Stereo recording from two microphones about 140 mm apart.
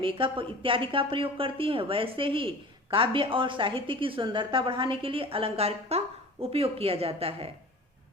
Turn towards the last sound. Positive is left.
turn(degrees=-45)  # may be behind; listen again after turning